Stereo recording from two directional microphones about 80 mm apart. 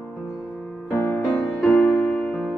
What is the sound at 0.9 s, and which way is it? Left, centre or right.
Music, left.